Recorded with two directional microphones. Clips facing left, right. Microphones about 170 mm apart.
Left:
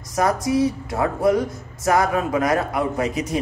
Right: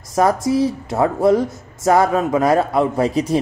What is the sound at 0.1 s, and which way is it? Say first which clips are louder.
A man's voice: right 4 dB; 25° right (ahead or behind).